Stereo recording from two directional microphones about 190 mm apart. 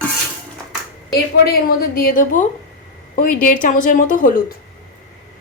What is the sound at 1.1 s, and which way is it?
A woman's voice, 55° left (ahead or behind).